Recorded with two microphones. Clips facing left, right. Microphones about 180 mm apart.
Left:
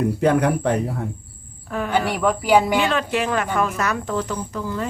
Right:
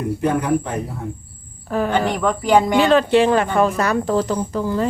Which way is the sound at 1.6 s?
35° right (ahead or behind).